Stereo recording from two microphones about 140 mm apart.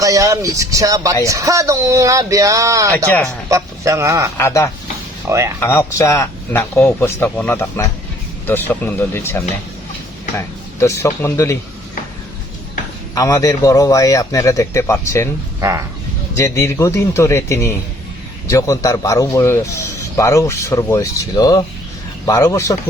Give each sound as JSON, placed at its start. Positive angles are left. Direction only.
{"t": 0.0, "sound": "speech", "side_deg": -25}
{"t": 4.4, "sound": "a man's voice", "side_deg": 20}
{"t": 5.3, "sound": "speech", "side_deg": -20}
{"t": 5.5, "sound": "speech", "side_deg": 20}
{"t": 13.1, "sound": "a man's voice", "side_deg": 25}
{"t": 16.4, "sound": "a man's voice", "side_deg": 20}